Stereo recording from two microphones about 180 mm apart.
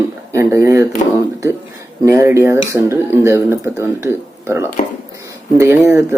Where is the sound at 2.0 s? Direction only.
15° right (ahead or behind).